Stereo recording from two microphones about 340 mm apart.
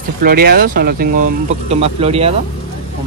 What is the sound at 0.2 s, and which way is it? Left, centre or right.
Speech, right.